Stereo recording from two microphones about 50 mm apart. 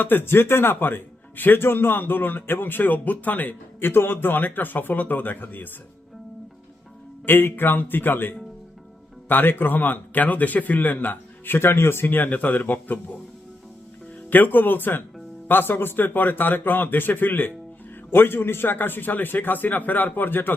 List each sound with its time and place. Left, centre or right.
0.0 s speech: left
7.3 s speech: left
14.3 s speech: left